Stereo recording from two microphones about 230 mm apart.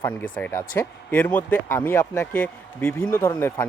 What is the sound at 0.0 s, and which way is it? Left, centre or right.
Speech, centre.